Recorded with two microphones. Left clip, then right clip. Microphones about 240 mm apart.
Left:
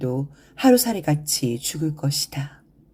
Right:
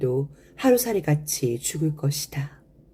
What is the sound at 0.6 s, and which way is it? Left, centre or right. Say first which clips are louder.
Speech: left 2 dB; left.